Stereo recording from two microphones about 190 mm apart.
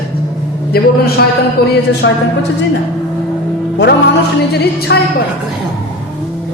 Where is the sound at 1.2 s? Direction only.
55° left (ahead or behind).